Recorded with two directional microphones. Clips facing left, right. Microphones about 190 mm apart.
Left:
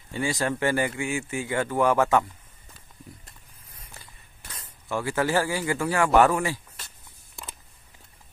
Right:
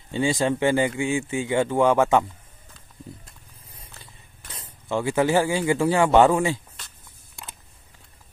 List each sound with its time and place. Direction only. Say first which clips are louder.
0.1 s speech: right 5 dB; 20° right (ahead or behind)
4.6 s speech: right 4 dB; 20° right (ahead or behind)